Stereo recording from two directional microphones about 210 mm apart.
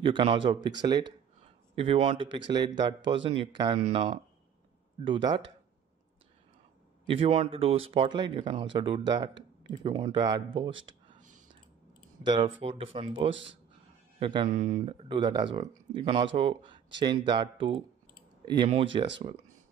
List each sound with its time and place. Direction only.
0.0 s speech: 25° right (ahead or behind)
7.1 s speech: 25° right (ahead or behind)
10.7 s speech: 65° right (ahead or behind)
12.3 s speech: 25° right (ahead or behind)
14.5 s speech: 40° right (ahead or behind)
14.8 s speech: 25° right (ahead or behind)